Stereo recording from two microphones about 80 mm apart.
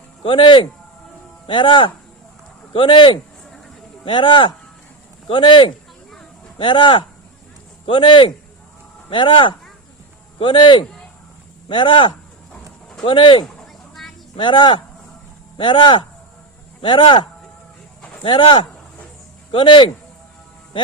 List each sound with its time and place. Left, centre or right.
0.3 s a man's voice: left
13.6 s a sound: centre
14.3 s a man's voice: left
18.3 s a man's voice: left